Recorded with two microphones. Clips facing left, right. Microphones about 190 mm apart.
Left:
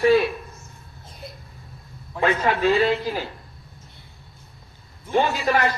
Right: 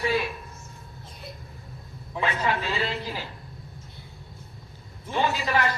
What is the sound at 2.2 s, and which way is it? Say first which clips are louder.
Speech: left 7 dB; 50° left (ahead or behind).